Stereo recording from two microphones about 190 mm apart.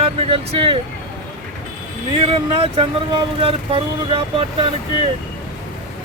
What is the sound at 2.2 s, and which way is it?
Speech, 30° right (ahead or behind).